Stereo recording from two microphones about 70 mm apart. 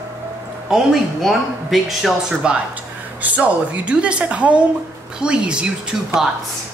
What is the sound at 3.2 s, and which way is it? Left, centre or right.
A woman's voice, right.